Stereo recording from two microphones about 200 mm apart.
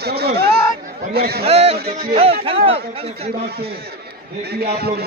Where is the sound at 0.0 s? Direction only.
55° right (ahead or behind).